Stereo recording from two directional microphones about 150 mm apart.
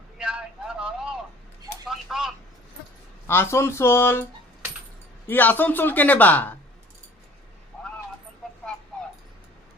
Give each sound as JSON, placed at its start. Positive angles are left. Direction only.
{"t": 0.2, "sound": "vehicle", "side_deg": -5}
{"t": 1.9, "sound": "a sound", "side_deg": -5}
{"t": 3.2, "sound": "speech", "side_deg": 15}
{"t": 5.3, "sound": "speech", "side_deg": 10}